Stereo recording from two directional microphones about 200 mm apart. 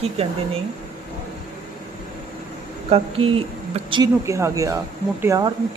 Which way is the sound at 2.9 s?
30° right (ahead or behind).